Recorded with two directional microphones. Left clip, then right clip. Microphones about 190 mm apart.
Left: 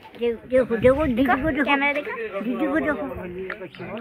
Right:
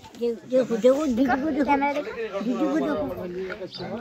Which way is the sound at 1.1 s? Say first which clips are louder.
Left 3 dB; 40° left (ahead or behind).